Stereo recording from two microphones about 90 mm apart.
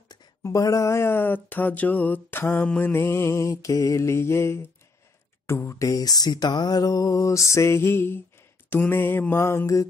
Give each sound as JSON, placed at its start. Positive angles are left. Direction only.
{"t": 0.4, "sound": "mantra", "side_deg": 35}
{"t": 2.9, "sound": "music", "side_deg": 30}
{"t": 8.6, "sound": "mantra", "side_deg": 20}
{"t": 9.3, "sound": "music", "side_deg": 35}